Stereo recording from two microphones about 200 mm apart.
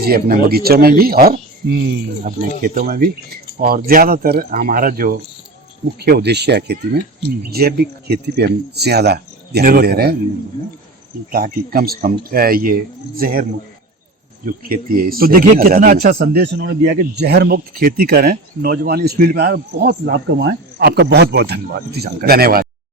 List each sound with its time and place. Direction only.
0.0 s speech: 50° right (ahead or behind)
2.6 s speech: 45° right (ahead or behind)
11.3 s speech: 45° right (ahead or behind)
14.4 s speech: 45° right (ahead or behind)